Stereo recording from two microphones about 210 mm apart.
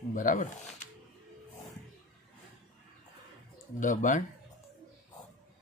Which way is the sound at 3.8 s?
35° left (ahead or behind).